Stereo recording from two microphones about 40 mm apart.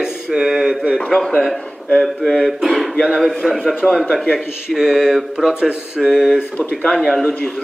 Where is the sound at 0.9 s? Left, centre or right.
Centre.